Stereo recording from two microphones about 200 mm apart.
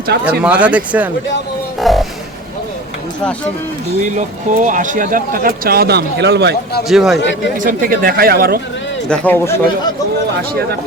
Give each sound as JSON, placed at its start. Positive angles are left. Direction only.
{"t": 0.1, "sound": "speech", "side_deg": -50}
{"t": 0.4, "sound": "speech", "side_deg": -5}
{"t": 1.8, "sound": "music", "side_deg": 0}
{"t": 4.0, "sound": "speech", "side_deg": -35}
{"t": 6.8, "sound": "a man's voice", "side_deg": 0}
{"t": 7.6, "sound": "speech", "side_deg": -45}
{"t": 9.0, "sound": "a man's voice", "side_deg": 5}